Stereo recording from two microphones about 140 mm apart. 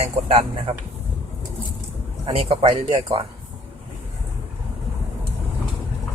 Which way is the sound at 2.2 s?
45° right (ahead or behind).